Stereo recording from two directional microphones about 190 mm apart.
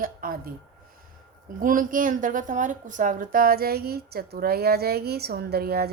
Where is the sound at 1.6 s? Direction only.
45° right (ahead or behind).